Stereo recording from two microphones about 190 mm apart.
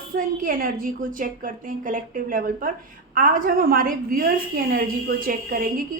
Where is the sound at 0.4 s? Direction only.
45° right (ahead or behind).